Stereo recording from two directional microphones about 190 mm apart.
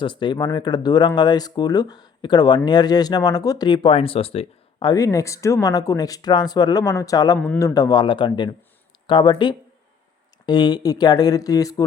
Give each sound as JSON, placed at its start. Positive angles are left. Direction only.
{"t": 0.0, "sound": "speech", "side_deg": 25}
{"t": 7.3, "sound": "a man's voice", "side_deg": 10}
{"t": 7.7, "sound": "speech", "side_deg": 20}